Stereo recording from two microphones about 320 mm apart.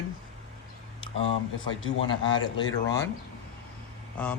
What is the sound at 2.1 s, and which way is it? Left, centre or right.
Speech, centre.